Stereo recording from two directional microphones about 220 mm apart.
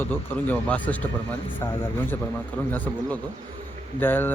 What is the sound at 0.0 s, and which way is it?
Speech, 5° left (ahead or behind).